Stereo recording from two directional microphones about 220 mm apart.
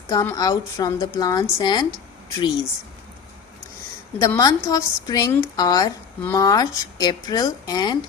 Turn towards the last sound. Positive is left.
turn(degrees=20)  # may be behind; listen again after turning